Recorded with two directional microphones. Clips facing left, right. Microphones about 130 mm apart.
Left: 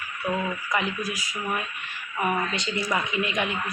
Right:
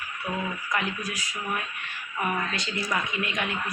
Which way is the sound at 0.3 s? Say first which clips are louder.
Left 4 dB; 15° left (ahead or behind).